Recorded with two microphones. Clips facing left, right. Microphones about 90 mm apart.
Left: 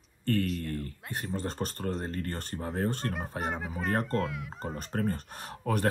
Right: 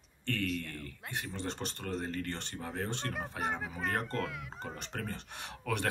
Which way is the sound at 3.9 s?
40° left (ahead or behind).